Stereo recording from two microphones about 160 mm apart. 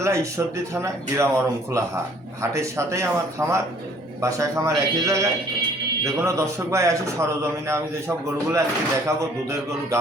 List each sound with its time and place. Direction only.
0.0 s a man's voice: 20° right (ahead or behind)